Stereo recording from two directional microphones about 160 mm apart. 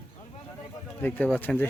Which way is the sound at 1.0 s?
10° left (ahead or behind).